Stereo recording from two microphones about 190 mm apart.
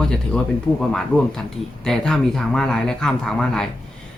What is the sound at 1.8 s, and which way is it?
Speech, centre (ahead or behind).